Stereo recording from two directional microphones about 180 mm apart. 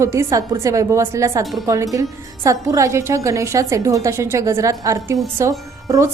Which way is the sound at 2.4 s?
20° right (ahead or behind).